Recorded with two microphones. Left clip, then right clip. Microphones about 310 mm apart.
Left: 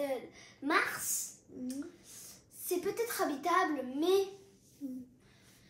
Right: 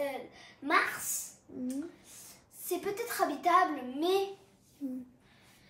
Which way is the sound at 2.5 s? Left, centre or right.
Centre.